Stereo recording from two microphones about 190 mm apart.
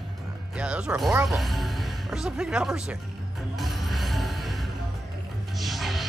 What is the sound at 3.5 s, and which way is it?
Music, centre (ahead or behind).